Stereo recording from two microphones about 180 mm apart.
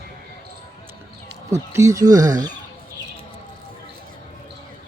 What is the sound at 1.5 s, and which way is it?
Speech, 15° right (ahead or behind).